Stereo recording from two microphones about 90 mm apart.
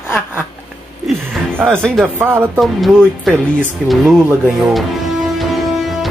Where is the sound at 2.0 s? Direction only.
25° right (ahead or behind).